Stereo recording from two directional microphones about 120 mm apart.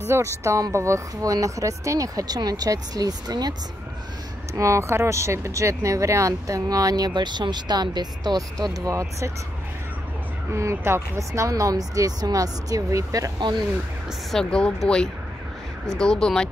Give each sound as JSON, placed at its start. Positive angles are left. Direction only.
{"t": 0.4, "sound": "speech", "side_deg": -25}
{"t": 4.6, "sound": "speech", "side_deg": -25}
{"t": 10.5, "sound": "speech", "side_deg": -25}
{"t": 14.3, "sound": "speech", "side_deg": 5}
{"t": 15.9, "sound": "speech", "side_deg": 5}